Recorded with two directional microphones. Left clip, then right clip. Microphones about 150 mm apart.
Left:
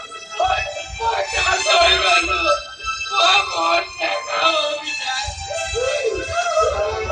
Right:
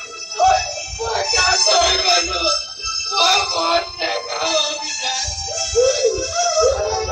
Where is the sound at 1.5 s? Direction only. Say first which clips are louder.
Left 3 dB; 20° left (ahead or behind).